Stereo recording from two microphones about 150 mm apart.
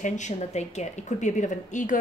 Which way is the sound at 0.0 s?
55° left (ahead or behind).